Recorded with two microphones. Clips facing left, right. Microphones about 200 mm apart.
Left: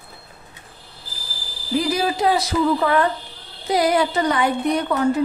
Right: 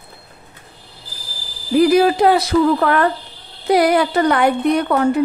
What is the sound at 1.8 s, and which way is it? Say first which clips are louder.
Speech: right 9 dB; 60° right (ahead or behind).